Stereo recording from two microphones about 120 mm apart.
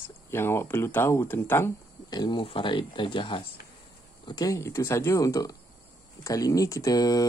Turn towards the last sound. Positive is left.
turn(degrees=30)  # may be behind; listen again after turning